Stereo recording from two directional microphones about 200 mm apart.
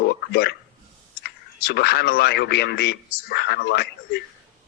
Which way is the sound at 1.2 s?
55° left (ahead or behind).